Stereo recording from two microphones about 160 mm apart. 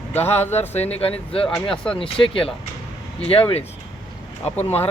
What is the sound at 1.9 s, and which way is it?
Speech, 35° left (ahead or behind).